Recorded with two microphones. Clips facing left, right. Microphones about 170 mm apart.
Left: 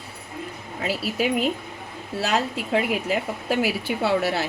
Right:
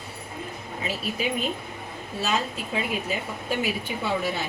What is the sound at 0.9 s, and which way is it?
A woman's voice, 80° left.